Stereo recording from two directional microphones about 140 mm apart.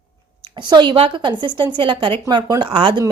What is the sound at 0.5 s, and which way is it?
A woman's voice, 35° right (ahead or behind).